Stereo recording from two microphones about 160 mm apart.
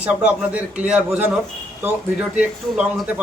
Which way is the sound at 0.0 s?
10° right (ahead or behind).